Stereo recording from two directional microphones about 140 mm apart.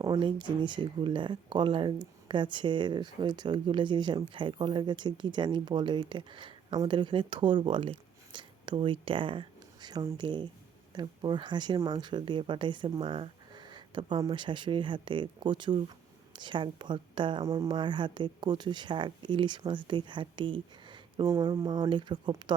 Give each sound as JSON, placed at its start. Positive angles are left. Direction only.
{"t": 0.0, "sound": "speech", "side_deg": -35}